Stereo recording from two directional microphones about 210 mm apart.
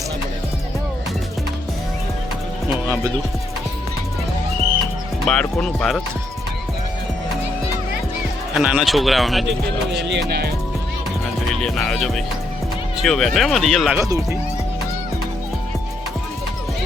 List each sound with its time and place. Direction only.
2.8 s music: 10° right (ahead or behind)
5.2 s speech: 5° left (ahead or behind)
8.5 s speech: centre (ahead or behind)
9.9 s music: 55° right (ahead or behind)
11.5 s speech: centre (ahead or behind)